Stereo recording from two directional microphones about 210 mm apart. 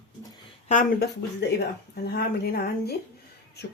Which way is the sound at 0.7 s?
40° left (ahead or behind).